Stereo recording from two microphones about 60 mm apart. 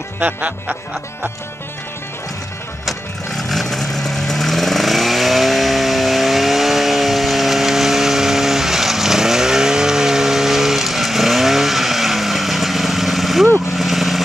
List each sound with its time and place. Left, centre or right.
0.2 s music: right
2.8 s vehicle: centre